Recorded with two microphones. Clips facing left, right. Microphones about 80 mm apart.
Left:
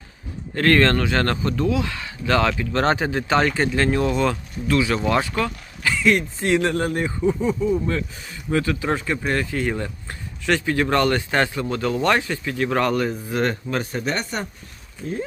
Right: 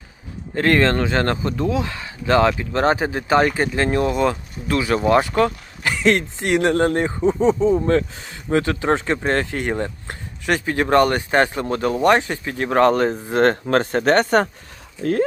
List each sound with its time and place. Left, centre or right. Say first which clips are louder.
0.5 s speech: even; right
5.8 s a sound: right 1 dB; right
6.4 s speech: even; right
6.7 s speech: right 5 dB; right
13.3 s speech: right 8 dB; right